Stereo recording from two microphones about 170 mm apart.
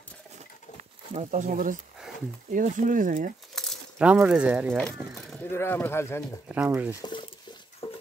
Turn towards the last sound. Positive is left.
turn(degrees=30)  # may be behind; listen again after turning